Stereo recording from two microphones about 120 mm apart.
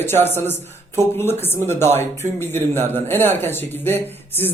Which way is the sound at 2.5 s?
20° left (ahead or behind).